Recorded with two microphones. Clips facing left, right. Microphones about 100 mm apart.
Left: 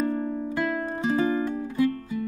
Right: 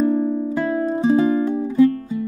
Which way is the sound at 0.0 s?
10° right (ahead or behind).